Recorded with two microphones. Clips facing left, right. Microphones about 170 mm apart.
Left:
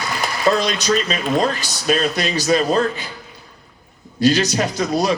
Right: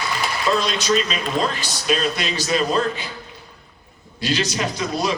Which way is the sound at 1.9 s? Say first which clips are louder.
Left 3 dB; 40° left (ahead or behind).